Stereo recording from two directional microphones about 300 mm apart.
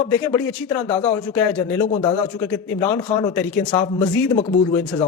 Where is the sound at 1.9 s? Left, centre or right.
Left.